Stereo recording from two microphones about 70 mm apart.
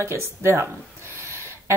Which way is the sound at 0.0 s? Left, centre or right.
Right.